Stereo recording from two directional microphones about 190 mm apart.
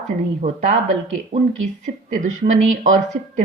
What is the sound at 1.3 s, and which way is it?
A woman's voice, 50° right (ahead or behind).